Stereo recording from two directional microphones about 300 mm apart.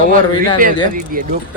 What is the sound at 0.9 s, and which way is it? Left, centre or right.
Speech, right.